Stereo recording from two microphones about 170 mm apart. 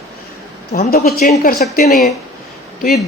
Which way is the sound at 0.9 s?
60° left (ahead or behind).